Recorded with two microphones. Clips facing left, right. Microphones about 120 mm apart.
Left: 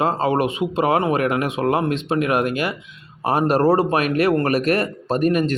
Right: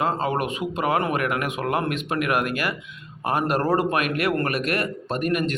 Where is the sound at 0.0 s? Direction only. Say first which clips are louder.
Left 5 dB; 35° left (ahead or behind).